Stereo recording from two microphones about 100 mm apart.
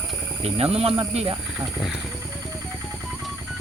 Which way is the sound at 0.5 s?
90° right.